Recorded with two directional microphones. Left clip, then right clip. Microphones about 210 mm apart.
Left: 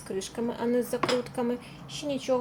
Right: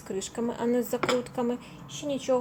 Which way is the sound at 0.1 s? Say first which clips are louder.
Even; 5° right (ahead or behind).